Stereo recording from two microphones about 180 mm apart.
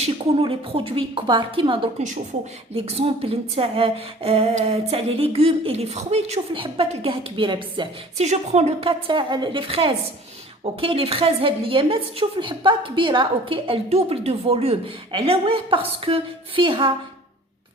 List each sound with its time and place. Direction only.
0.0 s a woman's voice: 35° right (ahead or behind)
8.2 s a woman's voice: 40° right (ahead or behind)